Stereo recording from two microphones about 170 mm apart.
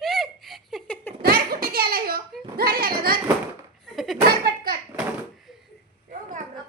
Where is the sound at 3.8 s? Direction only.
Centre (ahead or behind).